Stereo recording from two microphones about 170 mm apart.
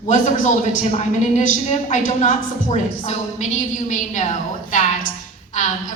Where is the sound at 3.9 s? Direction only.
50° left (ahead or behind).